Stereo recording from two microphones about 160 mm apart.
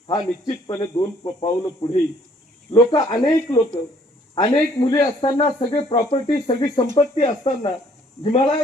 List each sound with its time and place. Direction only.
0.1 s speech: 25° left (ahead or behind)